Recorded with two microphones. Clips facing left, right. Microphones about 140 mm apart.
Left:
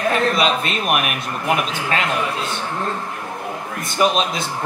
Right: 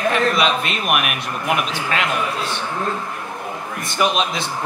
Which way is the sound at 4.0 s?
35° left (ahead or behind).